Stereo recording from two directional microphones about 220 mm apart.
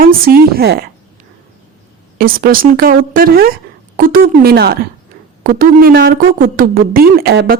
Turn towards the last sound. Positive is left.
turn(degrees=-45)  # may be behind; listen again after turning